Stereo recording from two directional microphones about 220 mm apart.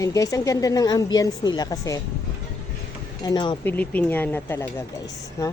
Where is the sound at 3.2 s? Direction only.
20° left (ahead or behind).